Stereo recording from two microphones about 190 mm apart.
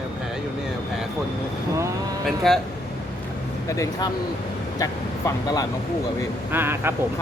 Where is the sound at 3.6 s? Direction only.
15° left (ahead or behind).